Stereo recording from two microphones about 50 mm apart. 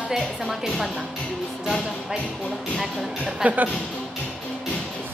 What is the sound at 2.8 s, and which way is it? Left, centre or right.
Speech, centre.